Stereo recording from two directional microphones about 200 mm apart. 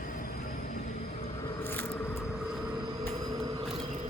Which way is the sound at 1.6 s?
10° left (ahead or behind).